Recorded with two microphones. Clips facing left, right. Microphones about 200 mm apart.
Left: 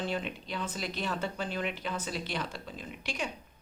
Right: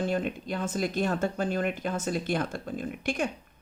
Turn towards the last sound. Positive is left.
turn(degrees=-50)  # may be behind; listen again after turning